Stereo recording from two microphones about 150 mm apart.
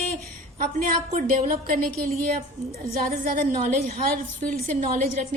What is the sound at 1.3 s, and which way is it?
A woman's voice, 70° right (ahead or behind).